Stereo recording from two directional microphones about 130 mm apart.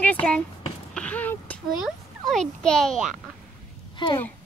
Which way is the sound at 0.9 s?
10° left (ahead or behind).